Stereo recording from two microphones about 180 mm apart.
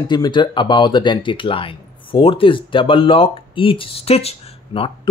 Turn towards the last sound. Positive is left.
turn(degrees=30)  # may be behind; listen again after turning